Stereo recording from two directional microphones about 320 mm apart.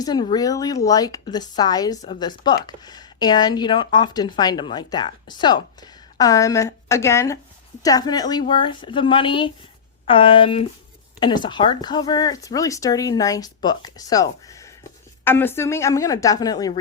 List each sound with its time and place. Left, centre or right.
0.0 s speech: centre